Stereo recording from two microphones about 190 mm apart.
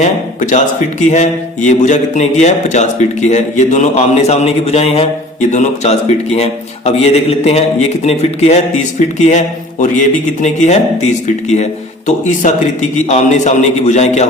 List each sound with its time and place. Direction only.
0.5 s speech: 40° left (ahead or behind)